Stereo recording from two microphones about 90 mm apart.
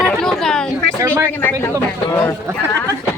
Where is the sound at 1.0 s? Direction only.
30° right (ahead or behind).